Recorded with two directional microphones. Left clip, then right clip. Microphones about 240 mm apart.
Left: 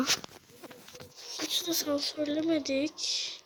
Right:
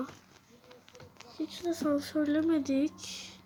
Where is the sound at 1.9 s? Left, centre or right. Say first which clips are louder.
Right 1 dB; centre.